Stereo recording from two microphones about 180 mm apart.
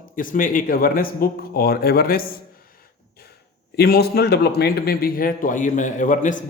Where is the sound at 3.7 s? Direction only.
60° left (ahead or behind); by 6.3 s 45° left (ahead or behind).